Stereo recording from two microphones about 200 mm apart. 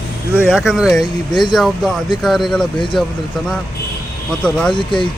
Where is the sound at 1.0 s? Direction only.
20° left (ahead or behind).